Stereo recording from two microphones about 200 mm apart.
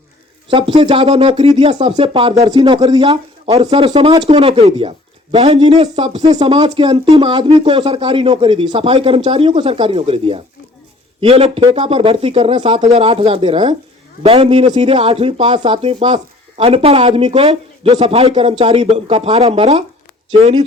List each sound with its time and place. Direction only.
0.5 s speech: 25° right (ahead or behind)